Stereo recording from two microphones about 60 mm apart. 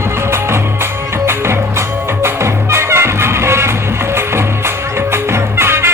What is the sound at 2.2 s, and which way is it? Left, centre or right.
Music, right.